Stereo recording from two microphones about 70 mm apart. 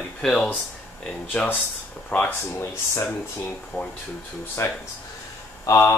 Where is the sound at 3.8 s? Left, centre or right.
Left.